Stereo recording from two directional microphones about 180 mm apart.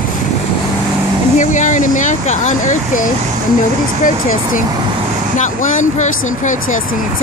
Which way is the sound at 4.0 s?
45° left (ahead or behind).